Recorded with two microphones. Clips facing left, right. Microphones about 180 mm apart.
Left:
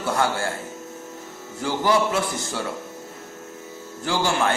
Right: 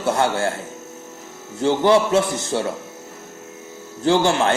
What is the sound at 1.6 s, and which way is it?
A man's voice, 25° right (ahead or behind).